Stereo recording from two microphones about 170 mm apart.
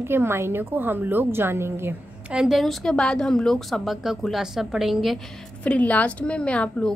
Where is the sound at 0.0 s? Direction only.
15° right (ahead or behind).